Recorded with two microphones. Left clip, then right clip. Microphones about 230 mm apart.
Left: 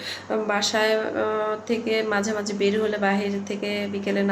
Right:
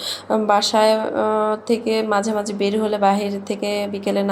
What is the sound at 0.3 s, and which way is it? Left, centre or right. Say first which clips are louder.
A woman's voice: right 7 dB; right.